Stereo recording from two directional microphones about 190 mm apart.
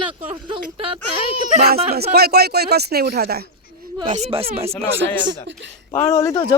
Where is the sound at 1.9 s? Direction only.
55° right (ahead or behind).